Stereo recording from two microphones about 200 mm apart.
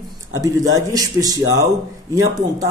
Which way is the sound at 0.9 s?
15° right (ahead or behind).